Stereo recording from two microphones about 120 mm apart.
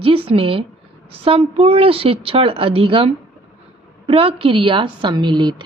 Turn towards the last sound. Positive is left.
turn(degrees=-40)  # may be behind; listen again after turning